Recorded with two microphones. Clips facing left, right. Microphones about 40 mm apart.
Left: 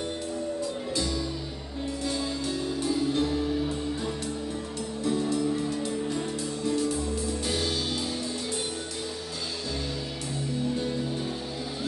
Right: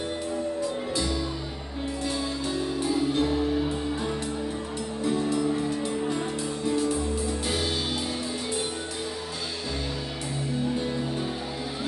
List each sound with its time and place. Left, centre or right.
2.6 s music: centre